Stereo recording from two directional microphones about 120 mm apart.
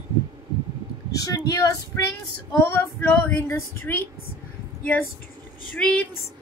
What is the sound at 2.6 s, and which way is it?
Speech, 20° left (ahead or behind).